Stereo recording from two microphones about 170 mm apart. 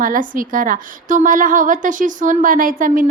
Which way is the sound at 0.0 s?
55° right (ahead or behind).